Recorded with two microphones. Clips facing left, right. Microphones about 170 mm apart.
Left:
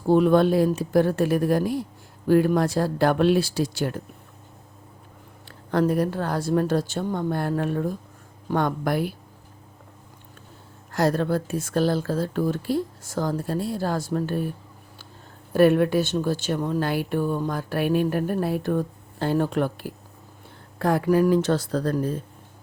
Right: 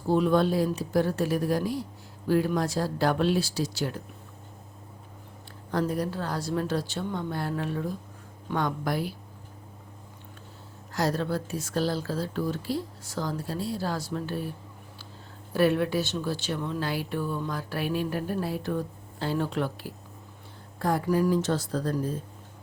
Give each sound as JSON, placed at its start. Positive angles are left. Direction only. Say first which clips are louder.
{"t": 0.1, "sound": "speech", "louder": "left 5 dB", "side_deg": 60}
{"t": 5.7, "sound": "speech", "louder": "left 6 dB", "side_deg": 60}
{"t": 10.9, "sound": "speech", "louder": "left 5 dB", "side_deg": 55}
{"t": 15.5, "sound": "speech", "louder": "left 6 dB", "side_deg": 50}
{"t": 20.7, "sound": "speech", "louder": "left 5 dB", "side_deg": 70}